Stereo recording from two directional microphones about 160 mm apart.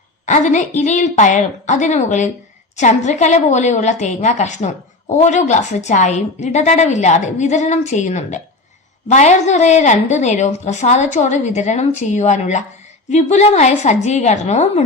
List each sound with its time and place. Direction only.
0.3 s a woman's voice: 50° left (ahead or behind)